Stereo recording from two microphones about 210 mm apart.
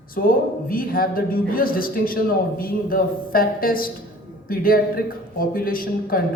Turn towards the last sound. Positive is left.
turn(degrees=45)  # may be behind; listen again after turning